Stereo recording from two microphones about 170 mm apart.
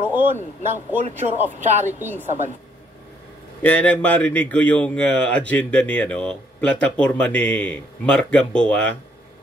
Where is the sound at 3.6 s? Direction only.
10° left (ahead or behind).